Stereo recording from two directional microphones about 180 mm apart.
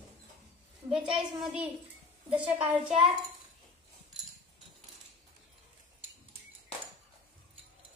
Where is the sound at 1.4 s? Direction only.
5° right (ahead or behind).